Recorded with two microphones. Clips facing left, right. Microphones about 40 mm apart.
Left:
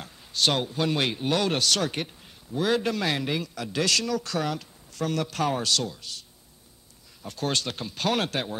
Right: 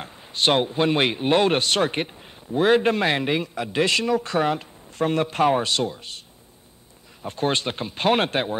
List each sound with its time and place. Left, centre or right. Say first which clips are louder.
0.0 s a man's voice: right 3 dB; right
7.2 s a man's voice: right 5 dB; right